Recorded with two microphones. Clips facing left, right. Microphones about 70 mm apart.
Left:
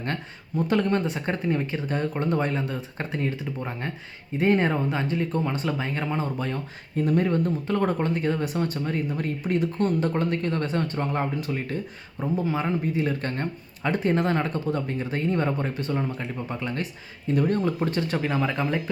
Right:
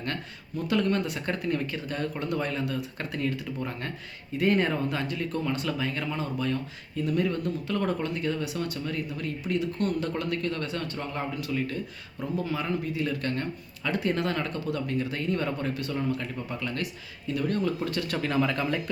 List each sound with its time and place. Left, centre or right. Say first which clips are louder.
0.0 s speech: left 3 dB; left
6.9 s speech: left 5 dB; left
18.2 s speech: left 1 dB; centre